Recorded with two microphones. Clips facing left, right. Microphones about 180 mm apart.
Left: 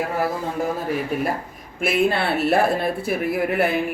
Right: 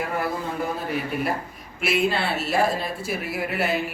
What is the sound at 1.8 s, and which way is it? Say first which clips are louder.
Speech: left 3 dB; 55° left (ahead or behind).